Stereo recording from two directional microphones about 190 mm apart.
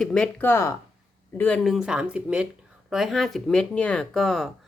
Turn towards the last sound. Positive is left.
turn(degrees=0)  # may be behind; listen again after turning